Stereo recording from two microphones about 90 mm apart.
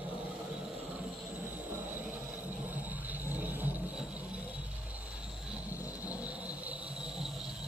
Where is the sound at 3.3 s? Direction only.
20° right (ahead or behind).